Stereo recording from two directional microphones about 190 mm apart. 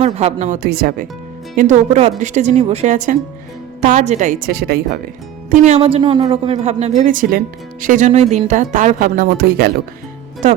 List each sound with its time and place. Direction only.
0.0 s speech: 35° right (ahead or behind); by 1.0 s 50° right (ahead or behind)
1.5 s a woman's voice: 40° right (ahead or behind); by 4.8 s 55° right (ahead or behind)
5.6 s a woman's voice: 35° right (ahead or behind); by 9.7 s 55° right (ahead or behind)